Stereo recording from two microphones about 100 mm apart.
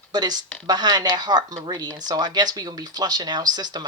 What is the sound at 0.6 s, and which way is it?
Speech, 45° right (ahead or behind).